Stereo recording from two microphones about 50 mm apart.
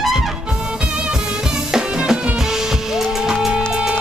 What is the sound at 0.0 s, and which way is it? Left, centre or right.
Music, centre.